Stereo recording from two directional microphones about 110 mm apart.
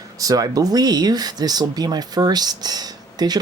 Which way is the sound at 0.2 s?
35° right (ahead or behind).